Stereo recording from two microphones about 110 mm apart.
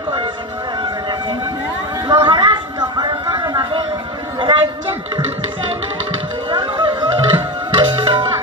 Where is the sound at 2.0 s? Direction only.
45° right (ahead or behind).